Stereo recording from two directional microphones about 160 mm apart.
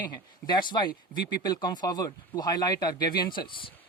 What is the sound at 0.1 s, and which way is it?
Speech, 25° left (ahead or behind).